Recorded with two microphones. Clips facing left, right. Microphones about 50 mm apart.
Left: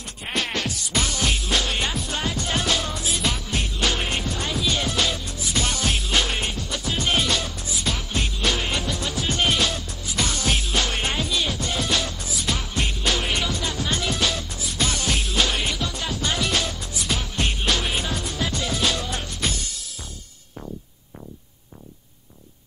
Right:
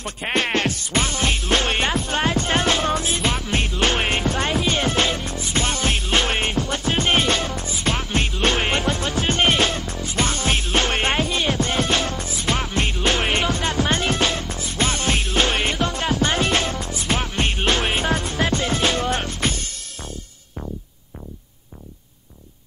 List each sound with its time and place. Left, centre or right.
0.0 s music: right
1.4 s music: right
3.3 s music: right